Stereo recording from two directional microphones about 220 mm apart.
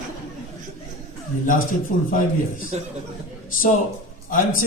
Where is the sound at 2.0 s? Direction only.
40° left (ahead or behind).